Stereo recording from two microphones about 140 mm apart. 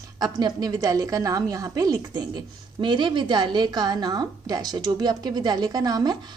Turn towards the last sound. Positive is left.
turn(degrees=-30)  # may be behind; listen again after turning